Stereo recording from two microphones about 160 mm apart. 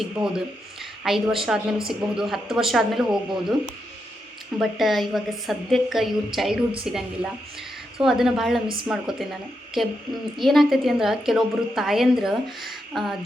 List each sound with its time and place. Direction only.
0.0 s a woman's voice: 5° right (ahead or behind)
4.5 s a woman's voice: centre (ahead or behind)
8.6 s a woman's voice: 30° right (ahead or behind)
8.9 s a woman's voice: centre (ahead or behind)